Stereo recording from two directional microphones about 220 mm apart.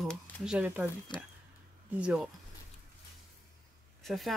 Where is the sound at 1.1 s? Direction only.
20° left (ahead or behind).